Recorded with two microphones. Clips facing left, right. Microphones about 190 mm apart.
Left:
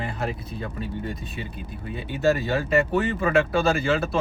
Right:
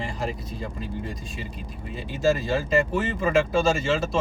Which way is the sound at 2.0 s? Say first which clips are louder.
Left 1 dB; 60° left (ahead or behind).